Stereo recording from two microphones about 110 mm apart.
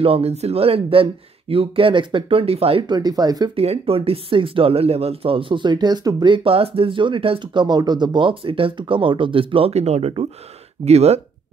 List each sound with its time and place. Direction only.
0.0 s speech: 65° right (ahead or behind)
2.9 s speech: 35° right (ahead or behind)
3.5 s speech: 65° right (ahead or behind)